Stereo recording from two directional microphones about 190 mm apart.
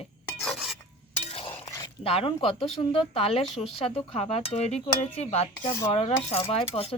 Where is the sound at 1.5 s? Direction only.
20° left (ahead or behind).